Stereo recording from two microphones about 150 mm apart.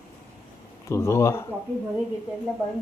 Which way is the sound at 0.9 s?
20° left (ahead or behind).